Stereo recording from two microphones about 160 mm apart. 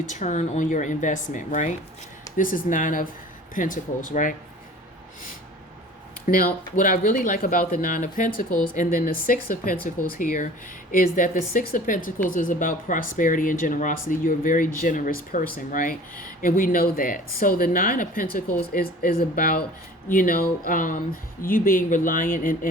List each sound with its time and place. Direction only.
0.1 s a woman's voice: 50° left (ahead or behind)
6.2 s a woman's voice: 60° left (ahead or behind)